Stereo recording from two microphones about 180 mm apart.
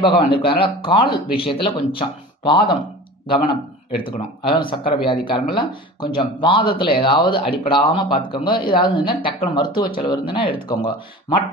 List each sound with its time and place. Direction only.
0.0 s speech: 30° left (ahead or behind)